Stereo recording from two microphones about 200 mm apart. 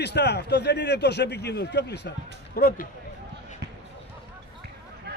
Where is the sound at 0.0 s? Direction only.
55° left (ahead or behind).